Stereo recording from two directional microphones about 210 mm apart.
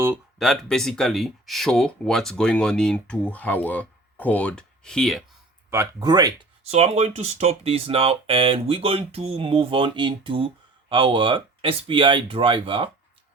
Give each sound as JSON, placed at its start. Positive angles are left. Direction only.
{"t": 0.0, "sound": "speech", "side_deg": -5}
{"t": 5.7, "sound": "speech", "side_deg": -15}
{"t": 6.7, "sound": "speech", "side_deg": -30}